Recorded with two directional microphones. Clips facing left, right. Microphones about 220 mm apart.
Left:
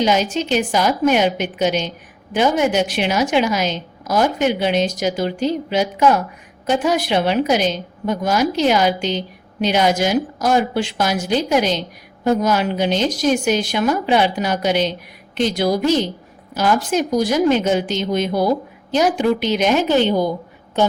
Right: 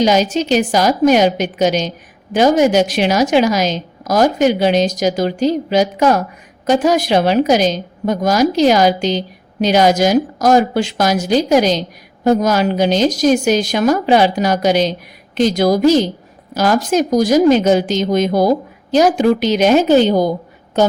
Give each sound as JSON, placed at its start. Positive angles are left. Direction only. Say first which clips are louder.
{"t": 0.0, "sound": "a woman's voice", "louder": "right 4 dB", "side_deg": -40}